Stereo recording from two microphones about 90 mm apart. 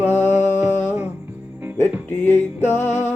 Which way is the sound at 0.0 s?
25° left (ahead or behind).